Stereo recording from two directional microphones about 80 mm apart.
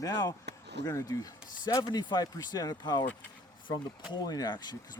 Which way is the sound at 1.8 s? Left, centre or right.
Left.